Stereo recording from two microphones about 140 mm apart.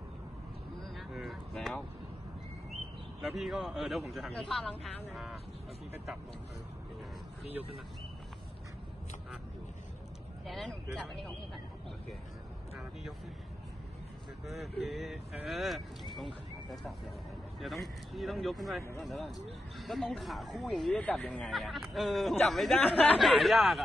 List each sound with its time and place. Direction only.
0.9 s a sound: centre (ahead or behind)
3.2 s speech: centre (ahead or behind)
10.4 s speech: centre (ahead or behind)
14.4 s speech: centre (ahead or behind)
17.6 s speech: centre (ahead or behind)